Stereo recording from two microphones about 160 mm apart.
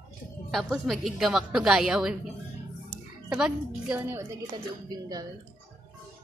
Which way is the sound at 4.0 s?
15° right (ahead or behind).